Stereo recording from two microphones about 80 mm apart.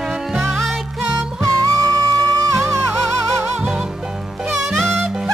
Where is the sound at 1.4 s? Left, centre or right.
Right.